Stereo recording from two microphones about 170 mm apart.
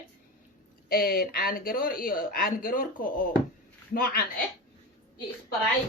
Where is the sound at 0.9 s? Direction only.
60° left (ahead or behind).